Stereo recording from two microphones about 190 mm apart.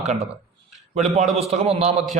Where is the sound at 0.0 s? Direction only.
35° right (ahead or behind).